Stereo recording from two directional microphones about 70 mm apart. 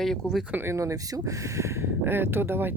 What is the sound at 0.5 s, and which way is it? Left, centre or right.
Speech, right.